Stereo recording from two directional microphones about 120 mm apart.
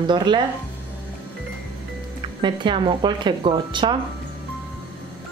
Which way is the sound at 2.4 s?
40° right (ahead or behind).